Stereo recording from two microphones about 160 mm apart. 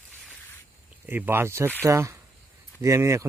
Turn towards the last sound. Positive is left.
turn(degrees=-15)  # may be behind; listen again after turning